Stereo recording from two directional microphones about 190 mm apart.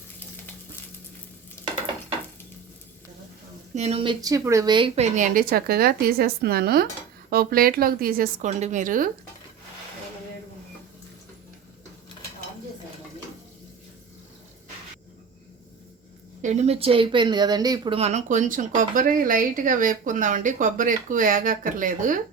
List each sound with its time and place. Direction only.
3.8 s speech: 30° right (ahead or behind)
5.1 s speech: 45° right (ahead or behind)
16.4 s speech: 35° right (ahead or behind)